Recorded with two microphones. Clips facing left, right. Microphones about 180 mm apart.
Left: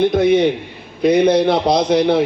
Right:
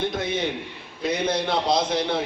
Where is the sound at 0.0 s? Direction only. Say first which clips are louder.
Left 13 dB; 60° left (ahead or behind).